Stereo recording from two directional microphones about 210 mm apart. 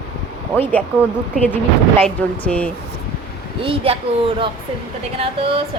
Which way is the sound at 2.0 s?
5° left (ahead or behind).